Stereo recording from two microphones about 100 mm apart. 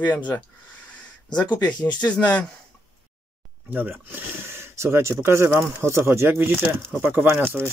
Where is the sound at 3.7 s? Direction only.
20° right (ahead or behind).